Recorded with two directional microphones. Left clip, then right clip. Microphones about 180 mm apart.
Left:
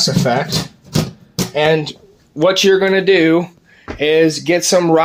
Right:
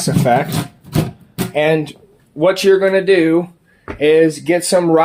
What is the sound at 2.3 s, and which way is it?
Speech, 25° left (ahead or behind).